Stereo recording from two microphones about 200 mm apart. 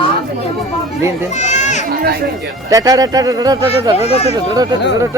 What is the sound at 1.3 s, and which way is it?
Speech, 35° left (ahead or behind).